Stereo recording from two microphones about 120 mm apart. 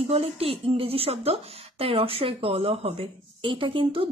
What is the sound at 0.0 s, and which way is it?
Speech, 55° right (ahead or behind).